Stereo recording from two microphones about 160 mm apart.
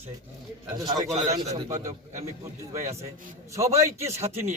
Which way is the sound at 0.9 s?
25° right (ahead or behind).